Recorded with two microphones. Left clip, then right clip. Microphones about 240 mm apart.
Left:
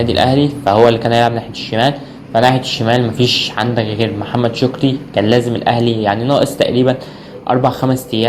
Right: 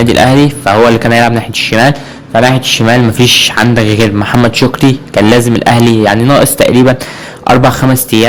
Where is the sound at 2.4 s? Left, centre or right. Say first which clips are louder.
Right 5 dB; right.